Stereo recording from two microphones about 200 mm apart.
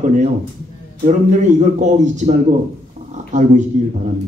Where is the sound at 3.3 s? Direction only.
35° right (ahead or behind).